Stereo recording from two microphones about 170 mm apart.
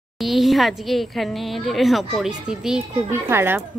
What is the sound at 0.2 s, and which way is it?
Speech, centre (ahead or behind).